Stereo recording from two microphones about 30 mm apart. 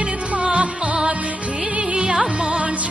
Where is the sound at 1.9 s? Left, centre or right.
Right.